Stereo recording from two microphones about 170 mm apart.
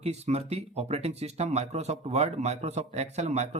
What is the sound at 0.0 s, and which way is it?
Speech, 40° right (ahead or behind).